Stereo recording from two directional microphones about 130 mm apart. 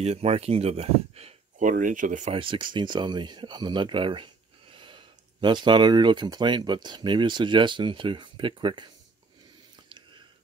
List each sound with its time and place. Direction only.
0.0 s speech: 50° right (ahead or behind)
1.6 s speech: 85° right
2.3 s speech: 40° right (ahead or behind)